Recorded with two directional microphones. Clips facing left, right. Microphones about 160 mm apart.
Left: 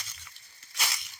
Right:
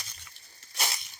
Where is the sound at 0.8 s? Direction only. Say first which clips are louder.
Right 2 dB; 35° right (ahead or behind).